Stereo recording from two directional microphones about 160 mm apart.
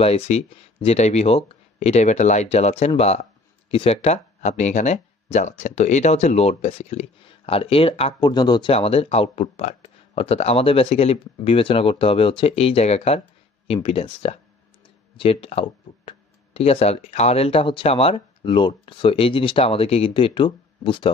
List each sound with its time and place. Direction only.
0.0 s speech: 40° left (ahead or behind)